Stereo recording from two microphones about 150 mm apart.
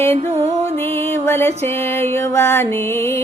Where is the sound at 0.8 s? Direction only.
15° left (ahead or behind).